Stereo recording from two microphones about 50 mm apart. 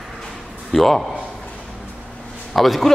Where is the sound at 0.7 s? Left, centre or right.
Centre.